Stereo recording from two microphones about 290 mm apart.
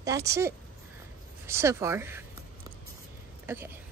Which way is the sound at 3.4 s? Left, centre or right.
Centre.